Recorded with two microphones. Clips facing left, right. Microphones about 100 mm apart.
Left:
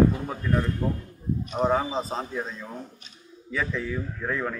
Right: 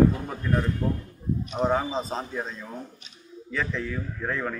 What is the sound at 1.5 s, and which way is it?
Speech, 5° left (ahead or behind).